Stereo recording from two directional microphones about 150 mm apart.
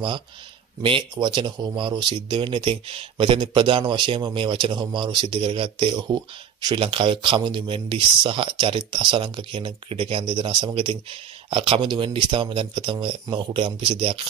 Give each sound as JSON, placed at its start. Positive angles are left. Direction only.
{"t": 0.8, "sound": "speech", "side_deg": -30}